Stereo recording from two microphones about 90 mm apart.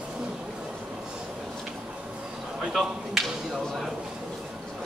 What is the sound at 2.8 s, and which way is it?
Speech, centre (ahead or behind).